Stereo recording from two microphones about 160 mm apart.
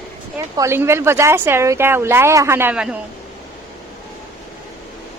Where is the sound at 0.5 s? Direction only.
15° right (ahead or behind).